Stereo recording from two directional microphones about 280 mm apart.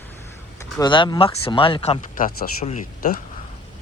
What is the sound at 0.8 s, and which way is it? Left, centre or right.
Speech, centre.